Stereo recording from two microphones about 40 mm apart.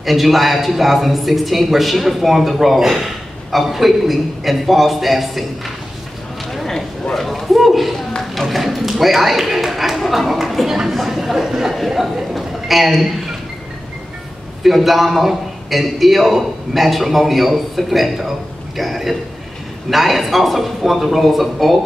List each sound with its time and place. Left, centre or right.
0.0 s a man's voice: centre
6.5 s a sound: centre
8.4 s a man's voice: centre
14.6 s a man's voice: centre